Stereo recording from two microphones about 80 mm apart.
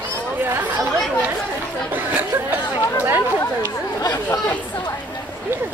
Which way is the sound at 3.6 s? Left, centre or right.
Left.